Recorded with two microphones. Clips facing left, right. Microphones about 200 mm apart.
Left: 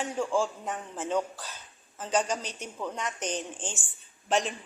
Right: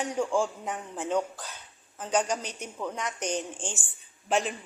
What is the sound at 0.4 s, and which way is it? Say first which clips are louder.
Speech: even; centre (ahead or behind).